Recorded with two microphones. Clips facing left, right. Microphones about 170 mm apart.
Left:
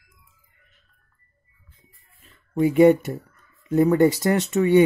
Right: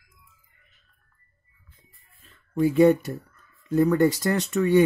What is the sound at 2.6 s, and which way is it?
Speech, 20° left (ahead or behind).